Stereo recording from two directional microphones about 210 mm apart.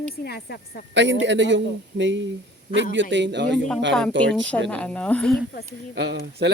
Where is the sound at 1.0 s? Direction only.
60° right (ahead or behind).